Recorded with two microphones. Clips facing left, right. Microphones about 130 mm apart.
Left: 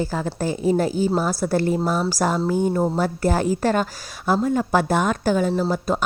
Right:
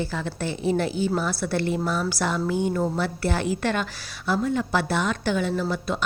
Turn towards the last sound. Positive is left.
turn(degrees=45)  # may be behind; listen again after turning